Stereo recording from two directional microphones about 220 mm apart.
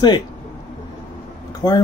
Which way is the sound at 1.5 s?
15° left (ahead or behind).